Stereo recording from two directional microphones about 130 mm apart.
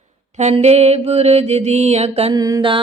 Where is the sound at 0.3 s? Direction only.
60° right (ahead or behind).